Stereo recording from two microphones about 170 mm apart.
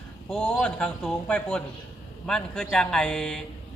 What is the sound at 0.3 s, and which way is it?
A man's voice, 5° left (ahead or behind).